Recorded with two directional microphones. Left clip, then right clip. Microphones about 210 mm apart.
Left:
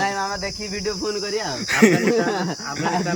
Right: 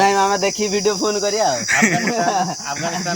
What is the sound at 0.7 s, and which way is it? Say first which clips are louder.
Cricket: right 7 dB; 35° right (ahead or behind).